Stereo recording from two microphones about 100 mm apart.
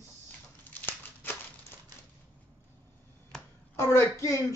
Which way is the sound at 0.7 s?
20° left (ahead or behind).